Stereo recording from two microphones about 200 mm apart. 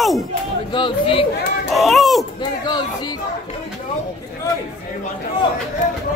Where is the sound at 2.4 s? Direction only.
20° left (ahead or behind).